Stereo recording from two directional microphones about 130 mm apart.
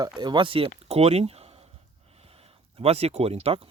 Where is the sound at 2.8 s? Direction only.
50° right (ahead or behind).